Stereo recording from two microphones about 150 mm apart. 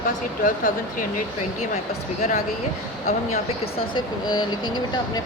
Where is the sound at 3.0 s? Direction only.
45° left (ahead or behind).